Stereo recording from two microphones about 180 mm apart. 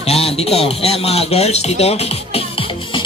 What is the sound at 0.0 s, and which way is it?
Speech, 35° left (ahead or behind).